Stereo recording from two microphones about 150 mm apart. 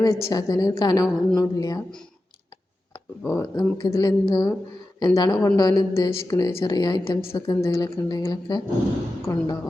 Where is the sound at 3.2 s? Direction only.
15° left (ahead or behind).